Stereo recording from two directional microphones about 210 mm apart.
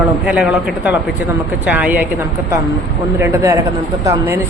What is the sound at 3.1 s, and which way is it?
Speech, 10° right (ahead or behind).